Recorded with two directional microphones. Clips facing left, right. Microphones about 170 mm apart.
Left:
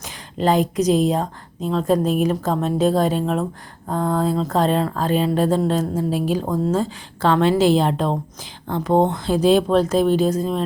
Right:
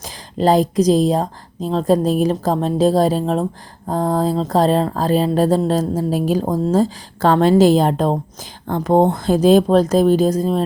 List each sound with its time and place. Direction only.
0.0 s speech: 35° right (ahead or behind)